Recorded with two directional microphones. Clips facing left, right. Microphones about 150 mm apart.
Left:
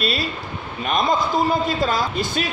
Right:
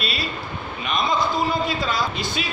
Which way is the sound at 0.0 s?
45° left (ahead or behind).